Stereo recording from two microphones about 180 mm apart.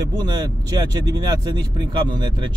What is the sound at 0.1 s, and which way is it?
Speech, 25° right (ahead or behind).